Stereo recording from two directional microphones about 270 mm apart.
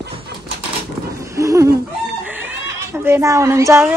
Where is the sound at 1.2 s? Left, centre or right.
Centre.